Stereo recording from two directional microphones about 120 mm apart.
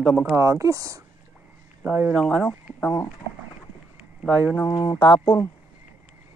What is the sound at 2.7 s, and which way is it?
Speech, 20° left (ahead or behind).